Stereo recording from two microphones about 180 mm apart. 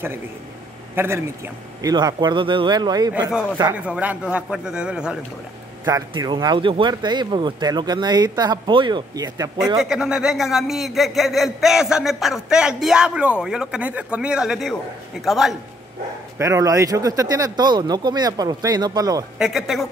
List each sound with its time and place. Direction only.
0.9 s speech: 15° right (ahead or behind)
3.7 s a man's voice: 5° right (ahead or behind)
5.9 s speech: 20° right (ahead or behind)
9.8 s a man's voice: 5° right (ahead or behind)
16.3 s speech: 15° right (ahead or behind)
19.3 s a man's voice: centre (ahead or behind)